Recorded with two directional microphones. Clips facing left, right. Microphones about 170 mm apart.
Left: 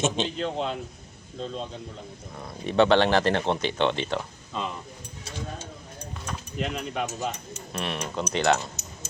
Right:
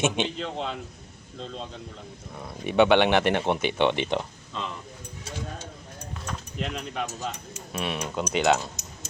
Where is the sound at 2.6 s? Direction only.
10° right (ahead or behind).